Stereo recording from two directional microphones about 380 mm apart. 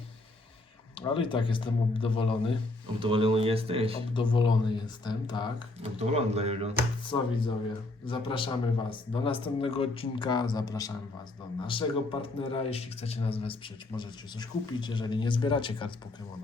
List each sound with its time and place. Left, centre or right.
0.9 s a man's voice: centre
3.0 s speech: centre
4.1 s a man's voice: centre
5.8 s speech: centre
7.1 s a man's voice: centre